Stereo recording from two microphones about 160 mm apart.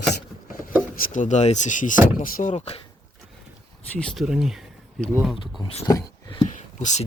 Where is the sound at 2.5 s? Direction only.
40° left (ahead or behind).